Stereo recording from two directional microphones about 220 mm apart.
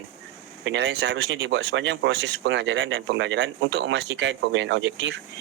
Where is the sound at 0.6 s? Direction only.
55° right (ahead or behind).